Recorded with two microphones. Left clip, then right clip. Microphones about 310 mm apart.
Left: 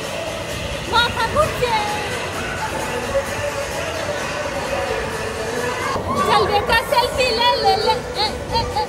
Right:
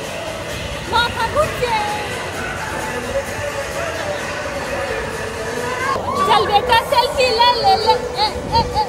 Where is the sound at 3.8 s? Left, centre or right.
Centre.